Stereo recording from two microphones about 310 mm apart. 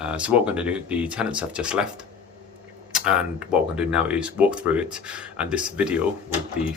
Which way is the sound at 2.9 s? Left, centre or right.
Centre.